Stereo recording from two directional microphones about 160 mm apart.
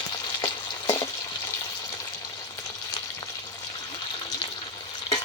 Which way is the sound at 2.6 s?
25° left (ahead or behind).